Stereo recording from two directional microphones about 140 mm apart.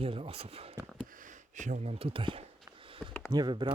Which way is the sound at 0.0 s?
45° right (ahead or behind).